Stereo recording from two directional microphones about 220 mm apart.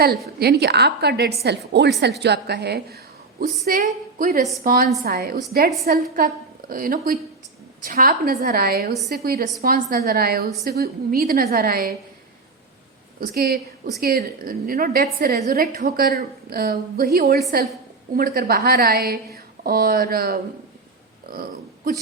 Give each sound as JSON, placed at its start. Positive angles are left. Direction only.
{"t": 0.3, "sound": "a woman's voice", "side_deg": -45}
{"t": 13.1, "sound": "a woman's voice", "side_deg": -45}